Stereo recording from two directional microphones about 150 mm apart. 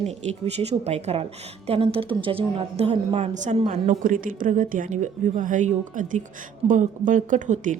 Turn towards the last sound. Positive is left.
turn(degrees=-60)  # may be behind; listen again after turning